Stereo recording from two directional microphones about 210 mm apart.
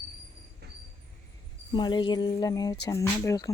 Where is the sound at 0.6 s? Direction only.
50° right (ahead or behind).